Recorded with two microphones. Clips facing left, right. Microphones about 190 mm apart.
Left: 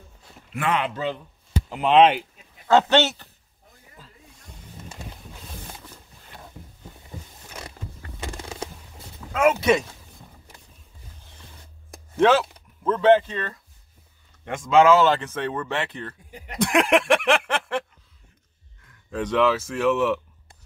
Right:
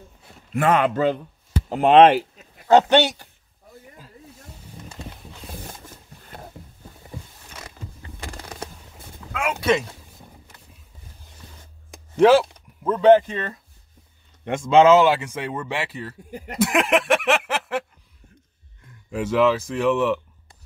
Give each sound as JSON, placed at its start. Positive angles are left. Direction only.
{"t": 0.5, "sound": "speech", "side_deg": -45}
{"t": 2.7, "sound": "speech", "side_deg": -15}
{"t": 9.3, "sound": "speech", "side_deg": 40}
{"t": 12.2, "sound": "a man's voice", "side_deg": -10}
{"t": 15.0, "sound": "speech", "side_deg": -10}
{"t": 16.3, "sound": "speech", "side_deg": -45}
{"t": 16.5, "sound": "speech", "side_deg": -5}
{"t": 19.0, "sound": "speech", "side_deg": -10}